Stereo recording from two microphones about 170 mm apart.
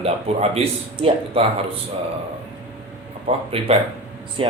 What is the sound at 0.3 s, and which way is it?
Speech, 35° right (ahead or behind).